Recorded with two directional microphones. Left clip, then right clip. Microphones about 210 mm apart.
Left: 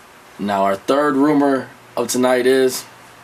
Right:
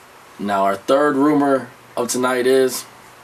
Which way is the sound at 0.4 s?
30° left (ahead or behind).